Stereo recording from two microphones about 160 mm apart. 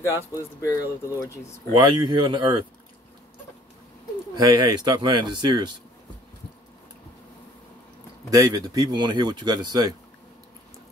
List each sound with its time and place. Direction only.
0.0 s speech: 15° left (ahead or behind)
1.8 s speech: 25° right (ahead or behind)
4.4 s speech: 25° right (ahead or behind)
8.3 s speech: 20° right (ahead or behind)